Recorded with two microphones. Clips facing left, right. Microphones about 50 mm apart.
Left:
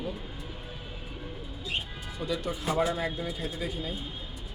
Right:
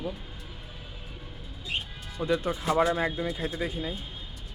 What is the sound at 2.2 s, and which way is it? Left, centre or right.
Speech, right.